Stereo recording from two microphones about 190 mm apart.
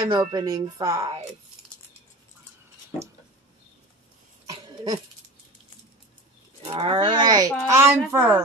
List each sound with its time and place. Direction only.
0.1 s speech: 20° right (ahead or behind)
4.5 s cough: 20° right (ahead or behind)
6.6 s a child's voice: 25° right (ahead or behind)